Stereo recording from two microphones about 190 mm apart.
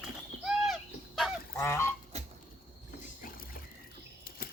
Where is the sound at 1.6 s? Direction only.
15° left (ahead or behind).